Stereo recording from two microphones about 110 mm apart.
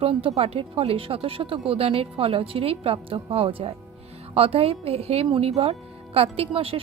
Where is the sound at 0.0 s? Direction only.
60° right (ahead or behind).